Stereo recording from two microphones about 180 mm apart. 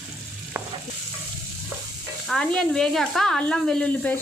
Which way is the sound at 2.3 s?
5° left (ahead or behind).